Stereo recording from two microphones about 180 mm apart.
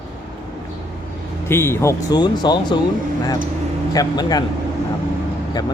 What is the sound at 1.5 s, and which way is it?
Speech, 15° left (ahead or behind).